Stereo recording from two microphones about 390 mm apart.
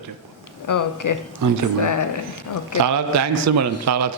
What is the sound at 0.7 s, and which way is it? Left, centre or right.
Speech, left.